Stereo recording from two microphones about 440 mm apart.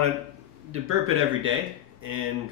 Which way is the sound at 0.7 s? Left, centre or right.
Right.